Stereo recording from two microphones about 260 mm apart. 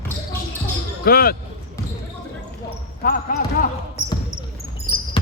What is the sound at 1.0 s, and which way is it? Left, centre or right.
Speech, left.